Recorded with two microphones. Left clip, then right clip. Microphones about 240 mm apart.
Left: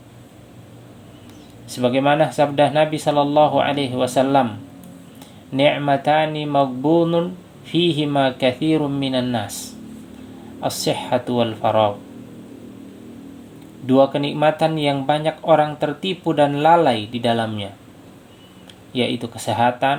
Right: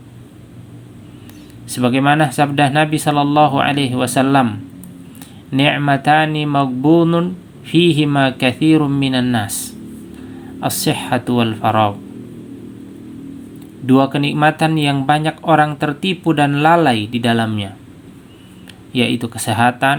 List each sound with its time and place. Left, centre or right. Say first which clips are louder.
1.7 s speech: right 3 dB; right
13.8 s speech: right 1 dB; right
18.9 s speech: right 4 dB; right